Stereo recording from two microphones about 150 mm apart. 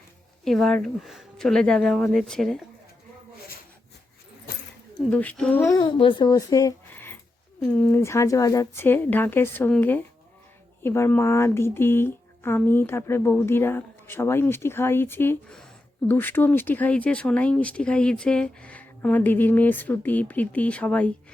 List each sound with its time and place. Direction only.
0.4 s speech: centre (ahead or behind)
4.9 s speech: 5° left (ahead or behind)
5.6 s a woman's voice: 30° left (ahead or behind); by 21.1 s 10° left (ahead or behind)